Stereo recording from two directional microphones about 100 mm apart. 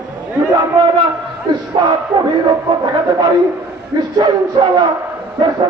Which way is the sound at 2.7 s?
50° right (ahead or behind).